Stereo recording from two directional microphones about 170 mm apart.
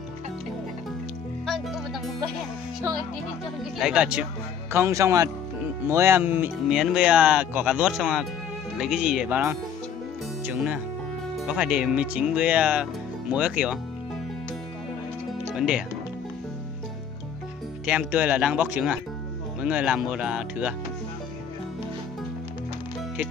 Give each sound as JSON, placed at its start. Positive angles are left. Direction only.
{"t": 1.4, "sound": "music", "side_deg": 0}
{"t": 3.7, "sound": "speech", "side_deg": -5}
{"t": 4.7, "sound": "speech", "side_deg": -15}
{"t": 15.5, "sound": "music", "side_deg": -5}
{"t": 17.8, "sound": "speech", "side_deg": -10}